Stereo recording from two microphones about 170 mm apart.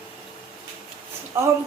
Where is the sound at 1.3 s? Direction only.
15° right (ahead or behind).